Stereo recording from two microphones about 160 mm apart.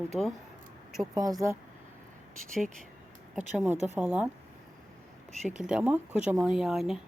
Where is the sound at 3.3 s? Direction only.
10° right (ahead or behind).